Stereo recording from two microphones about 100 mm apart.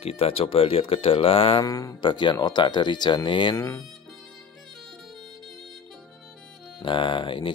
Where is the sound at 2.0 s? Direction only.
50° left (ahead or behind).